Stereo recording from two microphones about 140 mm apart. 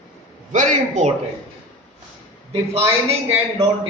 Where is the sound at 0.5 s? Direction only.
65° right (ahead or behind).